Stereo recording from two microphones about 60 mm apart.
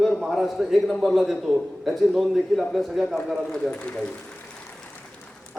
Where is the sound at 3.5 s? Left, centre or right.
Centre.